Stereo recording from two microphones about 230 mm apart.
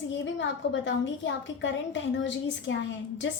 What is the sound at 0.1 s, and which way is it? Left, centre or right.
A woman's voice, left.